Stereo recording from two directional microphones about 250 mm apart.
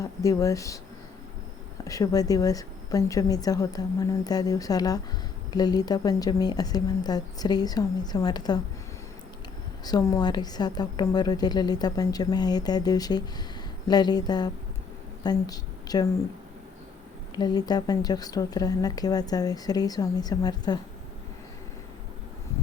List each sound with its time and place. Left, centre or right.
0.0 s a woman's voice: centre
1.8 s a woman's voice: centre
9.8 s a woman's voice: centre
17.3 s a woman's voice: centre